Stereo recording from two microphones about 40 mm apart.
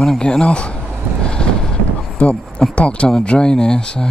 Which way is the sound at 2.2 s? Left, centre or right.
Left.